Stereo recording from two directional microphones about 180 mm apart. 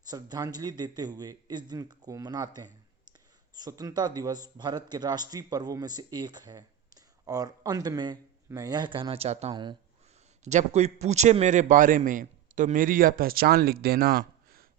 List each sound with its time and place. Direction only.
0.1 s speech: 20° right (ahead or behind)
9.5 s speech: 25° right (ahead or behind)
10.4 s a man's voice: 40° right (ahead or behind); by 14.7 s 55° right (ahead or behind)